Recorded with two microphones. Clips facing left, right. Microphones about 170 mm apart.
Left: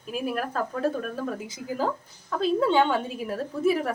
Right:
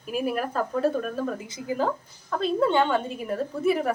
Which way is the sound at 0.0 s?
5° right (ahead or behind).